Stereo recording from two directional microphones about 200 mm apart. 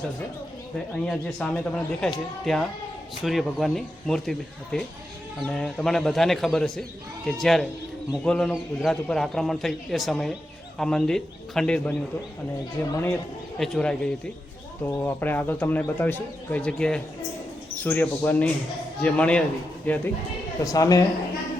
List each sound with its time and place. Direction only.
1.0 s a man's voice: 5° left (ahead or behind)
13.6 s a man's voice: 5° left (ahead or behind)
20.7 s speech: 15° left (ahead or behind)